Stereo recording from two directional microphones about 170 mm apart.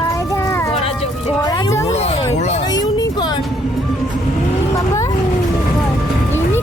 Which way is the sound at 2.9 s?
25° left (ahead or behind).